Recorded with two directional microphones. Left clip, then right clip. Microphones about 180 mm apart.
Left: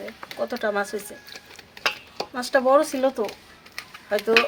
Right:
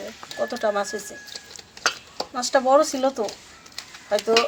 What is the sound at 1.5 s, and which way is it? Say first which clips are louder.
Clock: right 1 dB; 45° left (ahead or behind).